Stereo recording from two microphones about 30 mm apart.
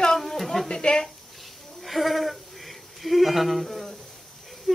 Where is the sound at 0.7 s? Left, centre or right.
Left.